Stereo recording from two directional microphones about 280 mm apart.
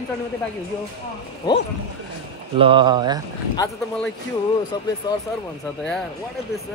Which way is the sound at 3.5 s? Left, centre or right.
Centre.